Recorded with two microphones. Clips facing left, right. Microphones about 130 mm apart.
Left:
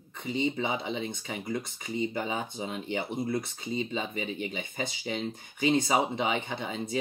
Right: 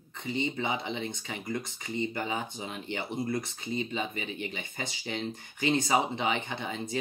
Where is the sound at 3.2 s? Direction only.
5° left (ahead or behind).